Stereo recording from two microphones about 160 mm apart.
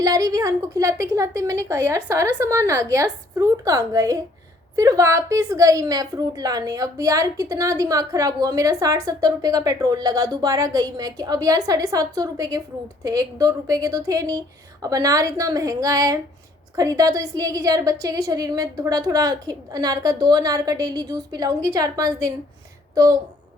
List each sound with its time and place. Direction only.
0.0 s a woman's voice: 20° right (ahead or behind)